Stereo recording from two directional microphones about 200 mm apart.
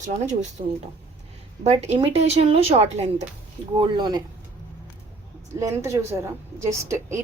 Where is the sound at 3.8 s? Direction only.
20° right (ahead or behind).